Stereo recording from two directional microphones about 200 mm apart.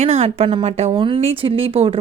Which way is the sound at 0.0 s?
30° right (ahead or behind).